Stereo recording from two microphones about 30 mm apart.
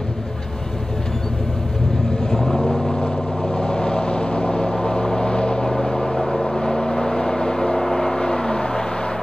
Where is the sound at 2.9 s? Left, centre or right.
Left.